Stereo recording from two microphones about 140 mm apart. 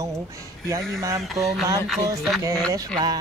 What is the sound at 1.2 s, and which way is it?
Speech, centre (ahead or behind).